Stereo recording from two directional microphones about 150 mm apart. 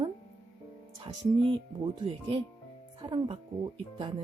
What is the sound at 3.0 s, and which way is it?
Speech, 30° right (ahead or behind).